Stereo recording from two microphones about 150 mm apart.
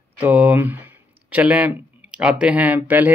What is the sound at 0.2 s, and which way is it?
Speech, 10° right (ahead or behind).